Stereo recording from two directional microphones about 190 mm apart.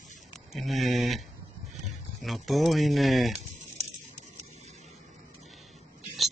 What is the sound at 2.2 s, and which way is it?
Speech, centre (ahead or behind).